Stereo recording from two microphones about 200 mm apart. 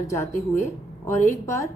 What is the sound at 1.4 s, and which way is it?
Speech, 15° left (ahead or behind).